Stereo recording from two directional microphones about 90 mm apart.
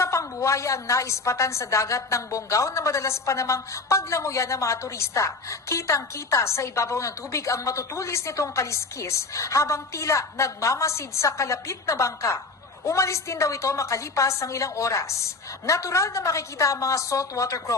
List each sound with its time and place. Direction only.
0.0 s a woman's voice: 30° left (ahead or behind)